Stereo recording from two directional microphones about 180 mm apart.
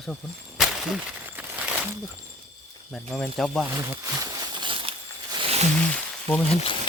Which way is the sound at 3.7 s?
15° right (ahead or behind).